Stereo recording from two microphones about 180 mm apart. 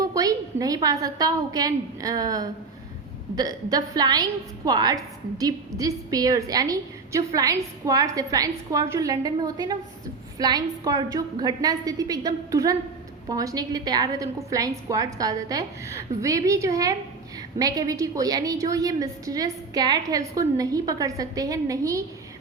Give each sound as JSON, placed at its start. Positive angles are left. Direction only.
{"t": 0.0, "sound": "a woman's voice", "side_deg": -20}